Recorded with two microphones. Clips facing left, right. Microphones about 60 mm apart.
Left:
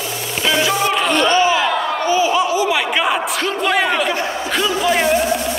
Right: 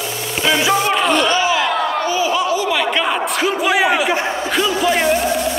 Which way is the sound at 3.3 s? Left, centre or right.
Centre.